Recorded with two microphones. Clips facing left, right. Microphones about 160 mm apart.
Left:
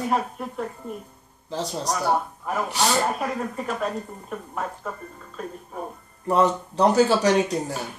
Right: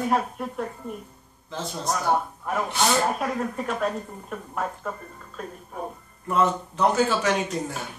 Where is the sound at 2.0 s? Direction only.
5° left (ahead or behind).